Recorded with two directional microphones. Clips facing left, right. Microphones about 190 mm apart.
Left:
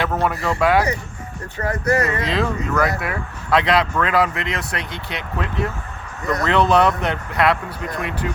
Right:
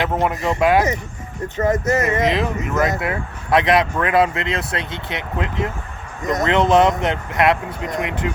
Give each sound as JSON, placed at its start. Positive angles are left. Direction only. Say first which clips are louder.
{"t": 0.0, "sound": "speech", "louder": "right 1 dB", "side_deg": -20}